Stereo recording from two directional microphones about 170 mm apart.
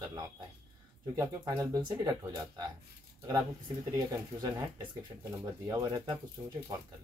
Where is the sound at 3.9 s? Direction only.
20° right (ahead or behind).